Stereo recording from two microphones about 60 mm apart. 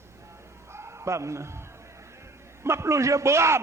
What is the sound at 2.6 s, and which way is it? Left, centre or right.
Speech, right.